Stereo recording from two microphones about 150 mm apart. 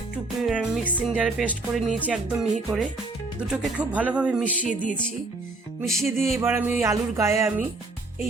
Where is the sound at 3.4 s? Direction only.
5° right (ahead or behind).